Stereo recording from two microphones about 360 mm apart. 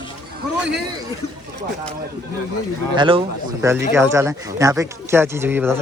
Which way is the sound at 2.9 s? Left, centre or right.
Centre.